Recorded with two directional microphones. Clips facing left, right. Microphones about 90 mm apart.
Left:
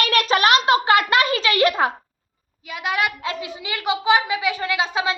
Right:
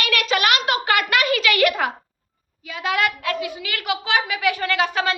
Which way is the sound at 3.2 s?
25° left (ahead or behind).